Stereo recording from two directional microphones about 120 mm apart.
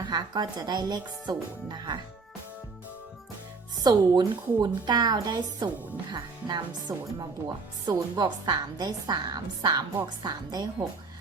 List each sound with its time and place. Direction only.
0.1 s speech: 35° right (ahead or behind)
3.8 s speech: 35° right (ahead or behind)